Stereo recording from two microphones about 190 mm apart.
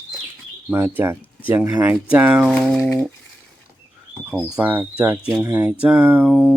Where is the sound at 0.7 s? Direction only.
10° right (ahead or behind).